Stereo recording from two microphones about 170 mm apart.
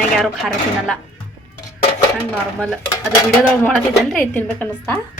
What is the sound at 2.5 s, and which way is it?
A woman's voice, centre (ahead or behind).